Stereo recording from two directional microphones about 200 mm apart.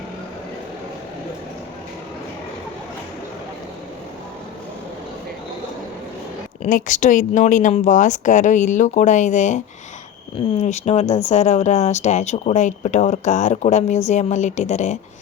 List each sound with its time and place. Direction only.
6.6 s speech: 40° left (ahead or behind)
10.6 s speech: 35° left (ahead or behind)